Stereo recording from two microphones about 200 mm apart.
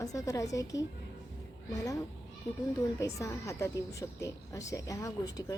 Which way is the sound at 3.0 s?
15° left (ahead or behind).